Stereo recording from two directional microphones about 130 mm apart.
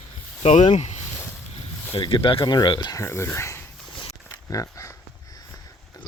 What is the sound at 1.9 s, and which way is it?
Speech, 40° left (ahead or behind).